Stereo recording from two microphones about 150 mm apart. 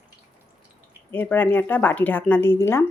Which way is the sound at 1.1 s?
15° left (ahead or behind).